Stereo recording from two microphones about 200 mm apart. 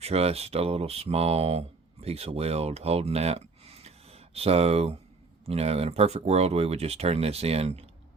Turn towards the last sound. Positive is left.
turn(degrees=-30)  # may be behind; listen again after turning